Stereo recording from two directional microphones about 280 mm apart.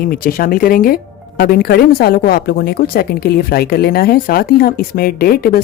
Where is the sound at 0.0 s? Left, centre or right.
Left.